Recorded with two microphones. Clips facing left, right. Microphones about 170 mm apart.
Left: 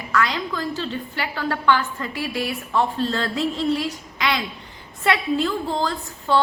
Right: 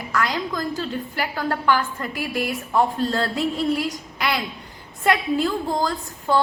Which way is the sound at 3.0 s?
40° right (ahead or behind).